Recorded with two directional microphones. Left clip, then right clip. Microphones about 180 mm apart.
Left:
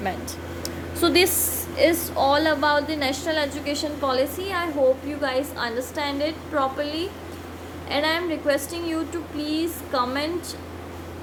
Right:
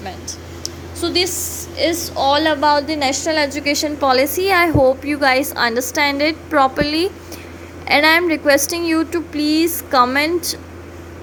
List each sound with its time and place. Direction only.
0.9 s a woman's voice: 20° left (ahead or behind)
1.7 s a woman's voice: 5° right (ahead or behind); by 10.3 s 55° right (ahead or behind)